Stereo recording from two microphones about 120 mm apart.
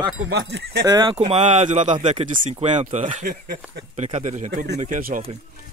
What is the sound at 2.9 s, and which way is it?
Speech, 75° right (ahead or behind).